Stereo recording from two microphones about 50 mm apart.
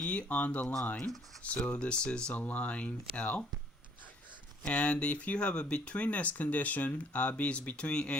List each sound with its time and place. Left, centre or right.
0.0 s speech: left
2.3 s speech: left
4.6 s speech: left